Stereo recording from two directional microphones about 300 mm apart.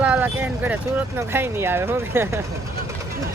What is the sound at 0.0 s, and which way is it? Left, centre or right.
Speech, centre.